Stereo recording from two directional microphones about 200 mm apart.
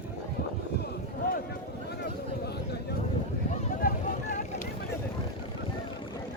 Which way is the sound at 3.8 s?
45° left (ahead or behind).